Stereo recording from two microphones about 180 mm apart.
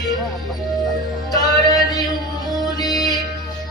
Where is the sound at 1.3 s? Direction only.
20° left (ahead or behind).